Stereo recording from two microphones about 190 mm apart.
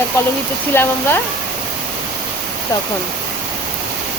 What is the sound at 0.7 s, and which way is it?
Speech, 10° left (ahead or behind).